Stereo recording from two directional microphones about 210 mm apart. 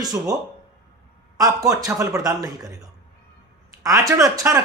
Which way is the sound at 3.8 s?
15° right (ahead or behind).